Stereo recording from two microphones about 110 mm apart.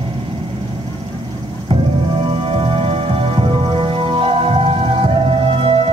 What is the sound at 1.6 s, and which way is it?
Music, 55° right (ahead or behind).